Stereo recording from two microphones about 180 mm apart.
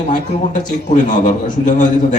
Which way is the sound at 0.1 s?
45° left (ahead or behind).